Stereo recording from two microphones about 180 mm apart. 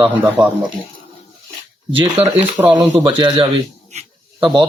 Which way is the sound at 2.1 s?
30° right (ahead or behind).